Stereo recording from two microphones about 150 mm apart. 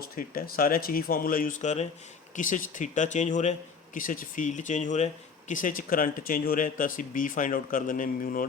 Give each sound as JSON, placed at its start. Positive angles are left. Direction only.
{"t": 0.2, "sound": "speech", "side_deg": 75}